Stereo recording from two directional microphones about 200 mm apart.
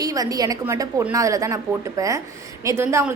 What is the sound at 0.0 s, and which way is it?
A woman's voice, 15° right (ahead or behind).